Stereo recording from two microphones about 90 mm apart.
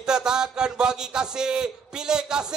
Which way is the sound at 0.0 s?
10° right (ahead or behind).